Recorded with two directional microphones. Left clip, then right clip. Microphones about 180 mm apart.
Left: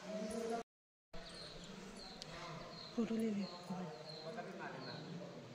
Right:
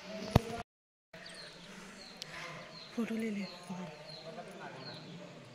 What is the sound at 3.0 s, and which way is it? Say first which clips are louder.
Speech: right 2 dB; 25° right (ahead or behind).